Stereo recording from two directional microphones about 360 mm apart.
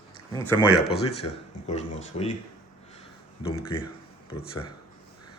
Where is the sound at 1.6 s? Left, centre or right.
Centre.